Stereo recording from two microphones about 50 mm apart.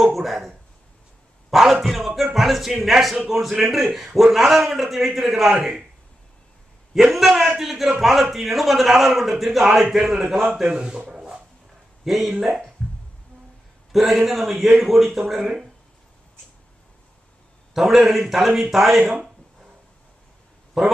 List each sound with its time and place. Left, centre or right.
0.0 s a sound: centre
1.5 s a man's voice: centre
6.9 s a man's voice: centre
10.7 s a sound: centre
12.0 s speech: centre
13.9 s a man's voice: centre
17.7 s a man's voice: centre
20.8 s a man's voice: centre